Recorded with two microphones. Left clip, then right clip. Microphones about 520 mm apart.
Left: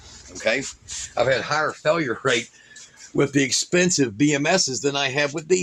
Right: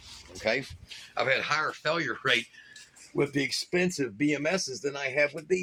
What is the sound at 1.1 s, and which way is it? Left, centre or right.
Speech, right.